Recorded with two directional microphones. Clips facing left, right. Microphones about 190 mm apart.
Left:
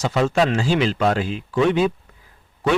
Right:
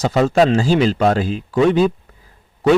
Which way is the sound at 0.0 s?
40° right (ahead or behind).